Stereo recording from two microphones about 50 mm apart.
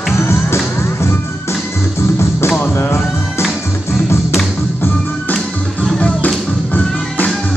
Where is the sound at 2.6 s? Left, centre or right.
Left.